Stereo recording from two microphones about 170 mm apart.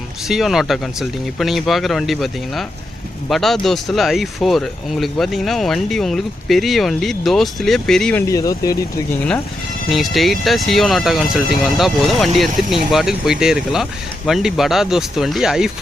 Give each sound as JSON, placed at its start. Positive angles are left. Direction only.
{"t": 0.3, "sound": "speech", "side_deg": 0}
{"t": 8.3, "sound": "speech", "side_deg": 20}
{"t": 9.9, "sound": "speech", "side_deg": 0}